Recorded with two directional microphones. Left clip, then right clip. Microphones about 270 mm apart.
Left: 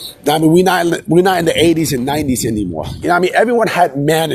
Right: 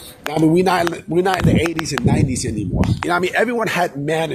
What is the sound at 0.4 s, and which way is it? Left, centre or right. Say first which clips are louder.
Speech: left 2 dB; left.